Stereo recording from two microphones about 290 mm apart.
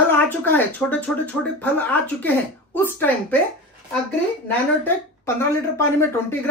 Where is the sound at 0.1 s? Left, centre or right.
Centre.